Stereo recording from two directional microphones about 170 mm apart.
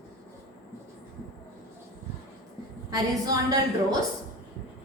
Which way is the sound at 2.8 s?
20° right (ahead or behind).